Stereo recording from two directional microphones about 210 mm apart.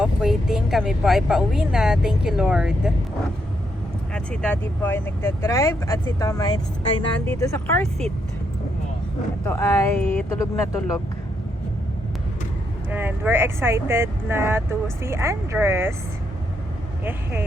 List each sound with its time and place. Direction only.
0.0 s speech: centre (ahead or behind)
4.1 s speech: 5° left (ahead or behind)
7.8 s speech: centre (ahead or behind)
9.4 s speech: 15° left (ahead or behind)
10.3 s speech: 15° left (ahead or behind)
12.9 s speech: 10° right (ahead or behind)
17.0 s speech: 10° right (ahead or behind)